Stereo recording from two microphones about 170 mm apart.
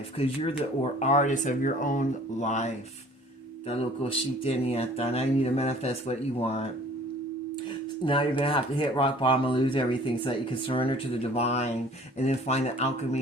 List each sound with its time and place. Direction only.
0.2 s speech: 35° left (ahead or behind)
8.0 s speech: 30° left (ahead or behind)